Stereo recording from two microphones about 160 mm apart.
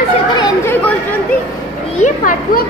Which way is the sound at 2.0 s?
55° left (ahead or behind).